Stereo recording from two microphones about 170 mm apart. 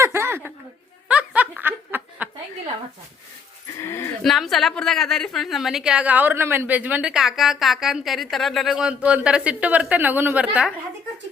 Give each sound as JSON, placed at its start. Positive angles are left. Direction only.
{"t": 0.0, "sound": "a sound", "side_deg": -15}
{"t": 1.0, "sound": "snicker", "side_deg": -10}
{"t": 3.8, "sound": "speech", "side_deg": 15}
{"t": 4.2, "sound": "a woman's voice", "side_deg": 0}